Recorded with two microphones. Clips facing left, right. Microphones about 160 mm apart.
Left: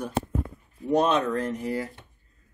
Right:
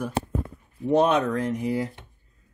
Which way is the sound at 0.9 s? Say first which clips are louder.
Right 2 dB; 15° right (ahead or behind).